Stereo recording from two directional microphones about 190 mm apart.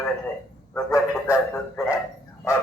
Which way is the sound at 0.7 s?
15° left (ahead or behind).